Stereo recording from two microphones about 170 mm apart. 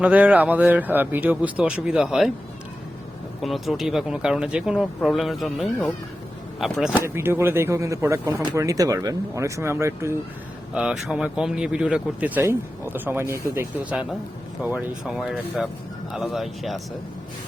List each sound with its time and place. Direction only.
0.0 s speech: 10° right (ahead or behind)
3.4 s speech: centre (ahead or behind)
7.0 s speech: 15° right (ahead or behind)
10.8 s speech: 5° right (ahead or behind)
14.6 s speech: 5° right (ahead or behind)